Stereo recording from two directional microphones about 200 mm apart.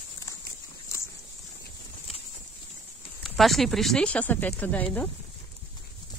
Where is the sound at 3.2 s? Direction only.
Centre (ahead or behind).